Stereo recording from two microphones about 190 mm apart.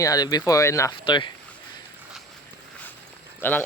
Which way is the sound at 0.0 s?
20° left (ahead or behind).